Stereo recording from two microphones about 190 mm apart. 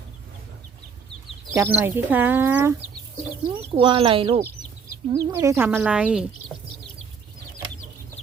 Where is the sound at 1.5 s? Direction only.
10° right (ahead or behind).